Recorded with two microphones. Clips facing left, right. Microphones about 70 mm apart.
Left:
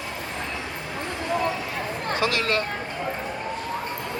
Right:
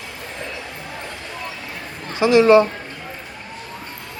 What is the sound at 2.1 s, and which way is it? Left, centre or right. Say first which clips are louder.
Speech: right 13 dB; right.